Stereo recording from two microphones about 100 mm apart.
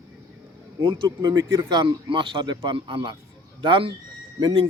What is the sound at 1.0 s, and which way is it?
Speech, 45° right (ahead or behind).